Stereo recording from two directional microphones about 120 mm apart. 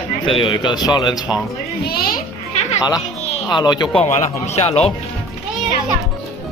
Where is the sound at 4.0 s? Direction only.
60° left (ahead or behind).